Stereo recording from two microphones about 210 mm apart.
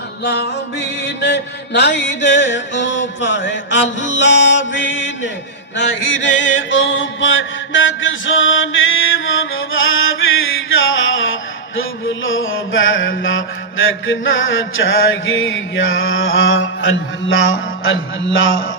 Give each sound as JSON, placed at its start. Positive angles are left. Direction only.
{"t": 0.3, "sound": "mantra", "side_deg": 55}